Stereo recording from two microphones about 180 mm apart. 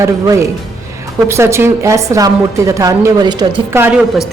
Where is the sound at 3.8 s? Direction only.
5° right (ahead or behind).